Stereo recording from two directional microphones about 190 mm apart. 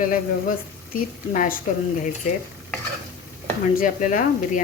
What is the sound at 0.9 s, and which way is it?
A woman's voice, 45° left (ahead or behind).